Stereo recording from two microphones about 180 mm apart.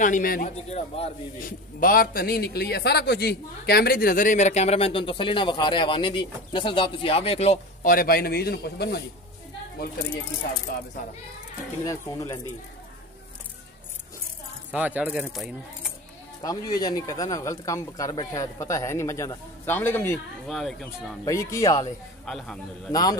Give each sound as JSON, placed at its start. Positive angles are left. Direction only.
{"t": 0.0, "sound": "a man's voice", "side_deg": 50}
{"t": 0.7, "sound": "a man's voice", "side_deg": 35}
{"t": 1.4, "sound": "a man's voice", "side_deg": 50}
{"t": 7.9, "sound": "a man's voice", "side_deg": 55}
{"t": 11.8, "sound": "speech", "side_deg": 15}
{"t": 14.7, "sound": "speech", "side_deg": -10}
{"t": 16.4, "sound": "speech", "side_deg": 20}
{"t": 21.3, "sound": "speech", "side_deg": 15}
{"t": 22.2, "sound": "speech", "side_deg": 5}